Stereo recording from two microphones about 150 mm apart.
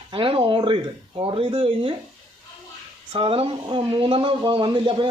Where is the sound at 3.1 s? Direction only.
40° right (ahead or behind).